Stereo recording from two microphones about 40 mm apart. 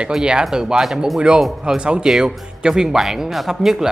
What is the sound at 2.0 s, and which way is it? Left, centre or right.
Speech, centre.